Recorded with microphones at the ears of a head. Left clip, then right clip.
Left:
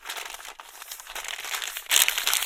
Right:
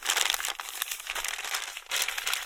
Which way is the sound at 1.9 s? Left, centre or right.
Left.